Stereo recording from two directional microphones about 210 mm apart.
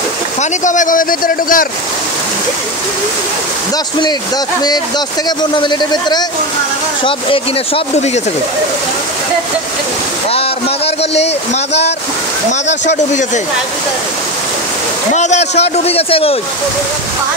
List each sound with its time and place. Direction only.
0.4 s speech: 35° left (ahead or behind)
4.6 s a man's voice: 20° left (ahead or behind)
12.4 s speech: 35° left (ahead or behind)
15.1 s a man's voice: 35° left (ahead or behind)